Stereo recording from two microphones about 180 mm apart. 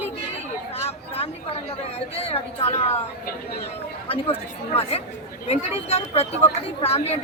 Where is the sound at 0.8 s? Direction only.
35° left (ahead or behind).